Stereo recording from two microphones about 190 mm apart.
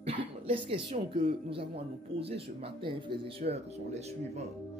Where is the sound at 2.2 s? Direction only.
30° right (ahead or behind).